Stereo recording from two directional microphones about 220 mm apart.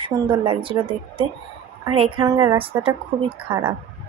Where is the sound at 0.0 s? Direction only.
25° right (ahead or behind).